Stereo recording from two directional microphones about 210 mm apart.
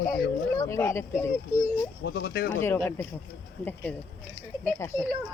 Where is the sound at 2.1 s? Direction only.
50° left (ahead or behind).